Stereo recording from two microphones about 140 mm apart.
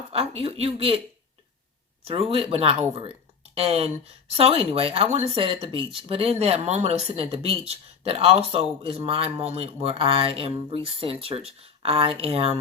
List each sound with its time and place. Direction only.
0.1 s a man's voice: 45° right (ahead or behind)
2.0 s a man's voice: 45° right (ahead or behind)